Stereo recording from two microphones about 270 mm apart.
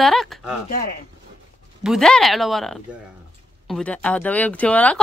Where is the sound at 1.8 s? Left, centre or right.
Centre.